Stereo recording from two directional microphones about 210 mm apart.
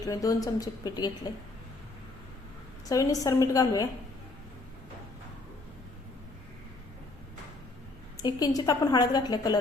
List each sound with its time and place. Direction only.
0.0 s a woman's voice: 15° left (ahead or behind)
2.9 s a woman's voice: 15° left (ahead or behind)
8.2 s a woman's voice: 20° left (ahead or behind)